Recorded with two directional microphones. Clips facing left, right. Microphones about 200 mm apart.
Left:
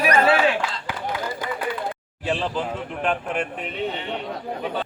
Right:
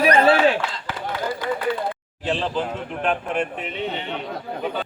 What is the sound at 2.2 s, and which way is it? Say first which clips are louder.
A man's voice: right 1 dB; 5° left (ahead or behind).